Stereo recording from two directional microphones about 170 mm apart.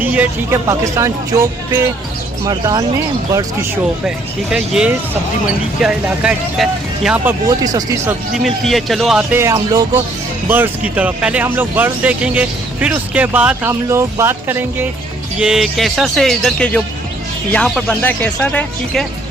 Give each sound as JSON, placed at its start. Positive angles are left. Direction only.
{"t": 0.0, "sound": "speech", "side_deg": -10}
{"t": 4.0, "sound": "speech", "side_deg": -5}
{"t": 7.3, "sound": "speech", "side_deg": -20}
{"t": 8.4, "sound": "speech", "side_deg": 0}
{"t": 9.3, "sound": "speech", "side_deg": -15}